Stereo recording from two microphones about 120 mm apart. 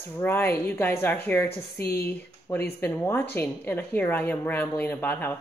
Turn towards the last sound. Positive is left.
turn(degrees=15)  # may be behind; listen again after turning